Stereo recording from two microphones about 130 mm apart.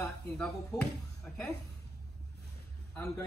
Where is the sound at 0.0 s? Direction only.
5° left (ahead or behind).